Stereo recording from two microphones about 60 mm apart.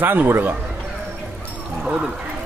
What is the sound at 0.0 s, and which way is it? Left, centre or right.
Speech, right.